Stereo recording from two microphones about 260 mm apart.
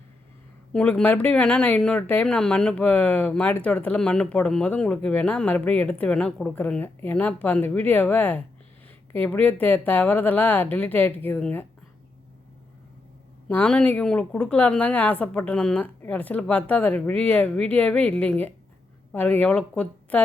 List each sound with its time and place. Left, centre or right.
0.7 s speech: centre
13.5 s speech: centre